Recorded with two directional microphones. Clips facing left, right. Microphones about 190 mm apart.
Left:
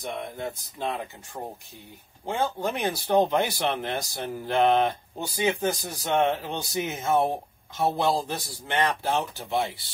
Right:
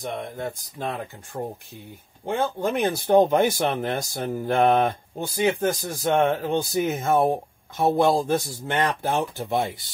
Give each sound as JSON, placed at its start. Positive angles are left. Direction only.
{"t": 0.0, "sound": "speech", "side_deg": -45}